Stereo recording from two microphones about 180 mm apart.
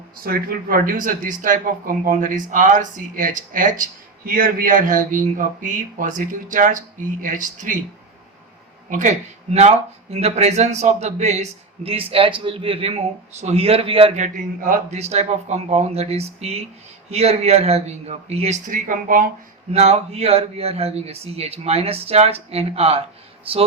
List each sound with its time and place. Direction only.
0.2 s speech: 55° right (ahead or behind)
8.9 s speech: 45° right (ahead or behind)
14.3 s speech: 50° right (ahead or behind)
19.7 s speech: 35° right (ahead or behind)